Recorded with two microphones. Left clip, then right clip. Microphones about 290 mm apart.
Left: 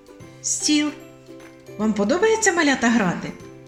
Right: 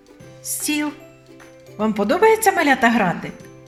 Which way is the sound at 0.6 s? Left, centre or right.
Right.